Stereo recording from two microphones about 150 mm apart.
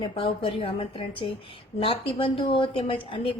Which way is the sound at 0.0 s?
35° left (ahead or behind).